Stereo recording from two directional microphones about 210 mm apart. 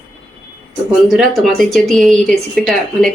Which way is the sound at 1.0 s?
Centre (ahead or behind).